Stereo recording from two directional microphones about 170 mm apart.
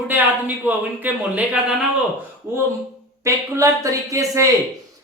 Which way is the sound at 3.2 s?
20° right (ahead or behind).